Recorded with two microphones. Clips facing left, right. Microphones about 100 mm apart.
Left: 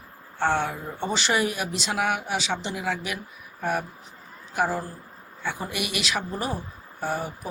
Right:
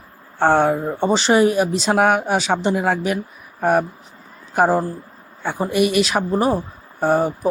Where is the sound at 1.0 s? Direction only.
30° right (ahead or behind).